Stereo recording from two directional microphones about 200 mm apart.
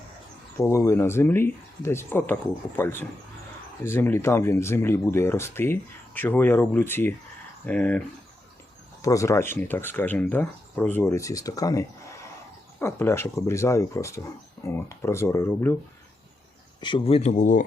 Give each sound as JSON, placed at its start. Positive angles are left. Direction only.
{"t": 0.5, "sound": "speech", "side_deg": 15}
{"t": 9.0, "sound": "speech", "side_deg": 15}
{"t": 16.8, "sound": "speech", "side_deg": 25}